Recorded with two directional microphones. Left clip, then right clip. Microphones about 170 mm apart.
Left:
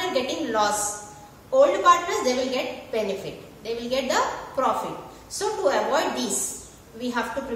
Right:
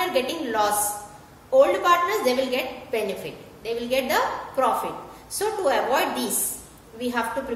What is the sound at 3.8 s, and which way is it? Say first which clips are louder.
Speech: right 1 dB; 35° right (ahead or behind).